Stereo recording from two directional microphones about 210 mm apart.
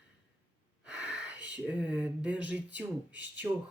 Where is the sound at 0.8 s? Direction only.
5° right (ahead or behind).